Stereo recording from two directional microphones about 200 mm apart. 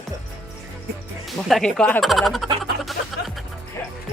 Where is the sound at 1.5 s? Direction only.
5° left (ahead or behind).